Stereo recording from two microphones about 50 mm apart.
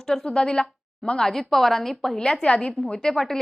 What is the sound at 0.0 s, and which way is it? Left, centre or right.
A woman's voice, centre.